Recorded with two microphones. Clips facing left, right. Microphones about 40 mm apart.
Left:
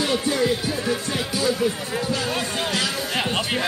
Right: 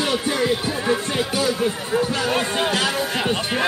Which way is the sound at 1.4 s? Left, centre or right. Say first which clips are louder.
Left 2 dB; right.